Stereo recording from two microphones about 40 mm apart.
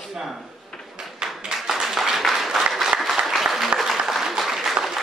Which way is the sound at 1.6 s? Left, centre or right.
Centre.